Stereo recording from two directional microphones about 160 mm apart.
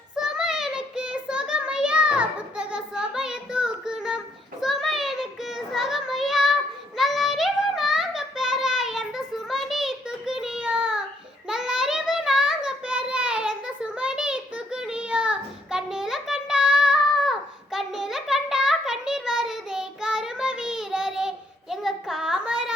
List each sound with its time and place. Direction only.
0.2 s child singing: 5° right (ahead or behind)